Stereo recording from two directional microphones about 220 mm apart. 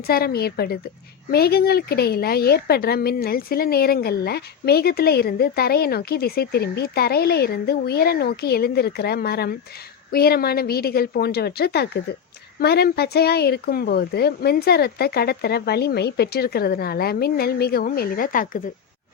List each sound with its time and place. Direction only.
0.1 s speech: 45° left (ahead or behind)